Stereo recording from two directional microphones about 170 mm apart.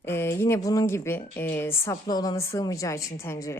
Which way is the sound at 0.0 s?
15° left (ahead or behind).